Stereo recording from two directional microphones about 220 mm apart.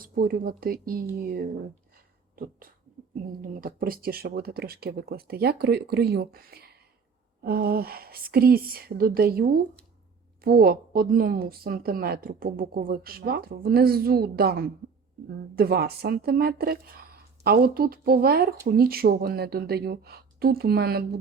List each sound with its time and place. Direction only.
0.0 s speech: 40° right (ahead or behind)
2.3 s beatboxing: 40° right (ahead or behind)
3.4 s speech: 40° right (ahead or behind)